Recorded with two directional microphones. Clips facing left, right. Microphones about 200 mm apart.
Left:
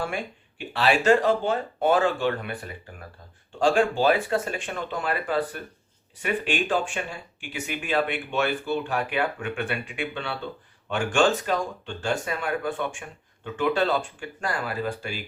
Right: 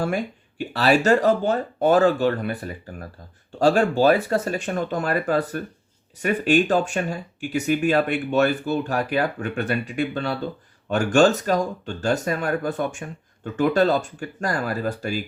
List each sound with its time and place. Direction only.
0.0 s speech: 40° right (ahead or behind)